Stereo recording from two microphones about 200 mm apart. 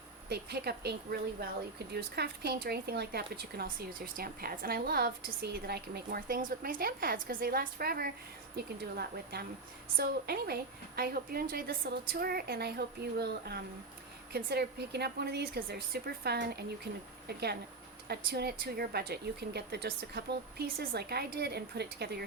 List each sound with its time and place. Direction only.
0.3 s a woman's voice: 55° right (ahead or behind)